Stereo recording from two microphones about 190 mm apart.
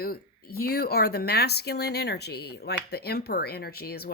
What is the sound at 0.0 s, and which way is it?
Speech, 55° left (ahead or behind).